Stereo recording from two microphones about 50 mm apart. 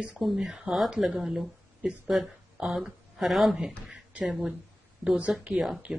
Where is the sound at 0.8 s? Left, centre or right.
Centre.